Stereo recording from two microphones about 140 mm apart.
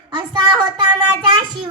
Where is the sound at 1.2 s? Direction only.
30° right (ahead or behind).